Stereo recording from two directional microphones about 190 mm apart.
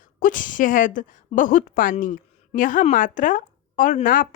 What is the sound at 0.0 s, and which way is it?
A woman's voice, 45° left (ahead or behind).